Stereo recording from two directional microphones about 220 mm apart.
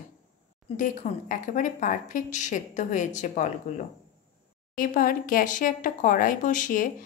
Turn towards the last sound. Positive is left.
turn(degrees=35)  # may be behind; listen again after turning